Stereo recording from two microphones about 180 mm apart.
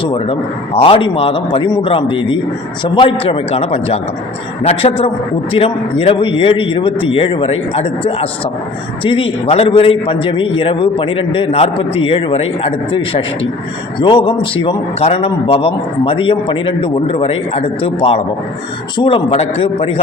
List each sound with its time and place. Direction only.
0.0 s a man's voice: 30° left (ahead or behind)